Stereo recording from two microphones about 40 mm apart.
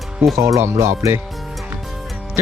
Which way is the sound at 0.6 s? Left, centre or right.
Right.